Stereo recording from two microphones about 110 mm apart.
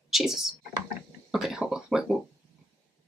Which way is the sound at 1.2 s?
5° right (ahead or behind).